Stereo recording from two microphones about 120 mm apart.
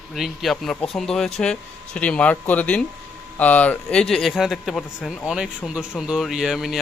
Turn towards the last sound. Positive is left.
turn(degrees=0)  # may be behind; listen again after turning